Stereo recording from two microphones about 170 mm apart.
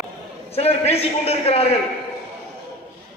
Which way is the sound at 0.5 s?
35° left (ahead or behind).